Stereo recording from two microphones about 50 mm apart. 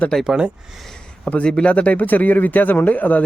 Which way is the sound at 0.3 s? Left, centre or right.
Centre.